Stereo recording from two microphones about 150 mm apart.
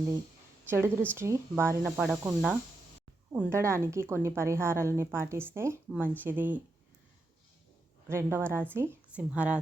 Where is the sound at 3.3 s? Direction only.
20° right (ahead or behind).